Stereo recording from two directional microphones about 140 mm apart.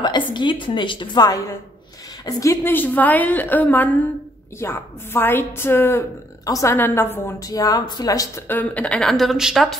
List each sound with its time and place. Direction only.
0.3 s a woman's voice: 35° left (ahead or behind)
8.5 s speech: 10° left (ahead or behind)